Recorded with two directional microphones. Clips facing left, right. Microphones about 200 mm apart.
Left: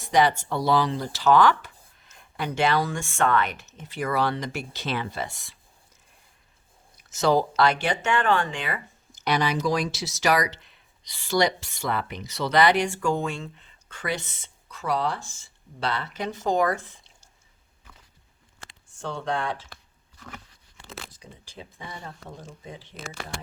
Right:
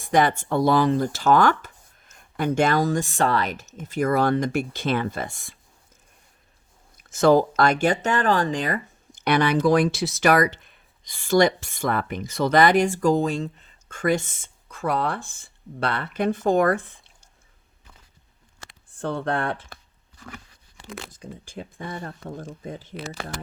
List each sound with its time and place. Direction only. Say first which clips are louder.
0.0 s speech: right 1 dB; 50° right (ahead or behind)
6.9 s speech: right 5 dB; 50° right (ahead or behind)
18.9 s speech: right 4 dB; 55° right (ahead or behind)
21.1 s speech: right 9 dB; 50° right (ahead or behind)